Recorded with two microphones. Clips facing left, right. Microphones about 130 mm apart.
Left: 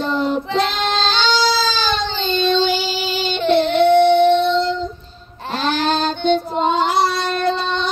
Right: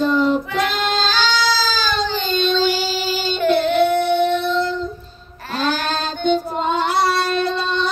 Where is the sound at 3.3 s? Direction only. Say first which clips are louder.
Left 1 dB; 25° left (ahead or behind).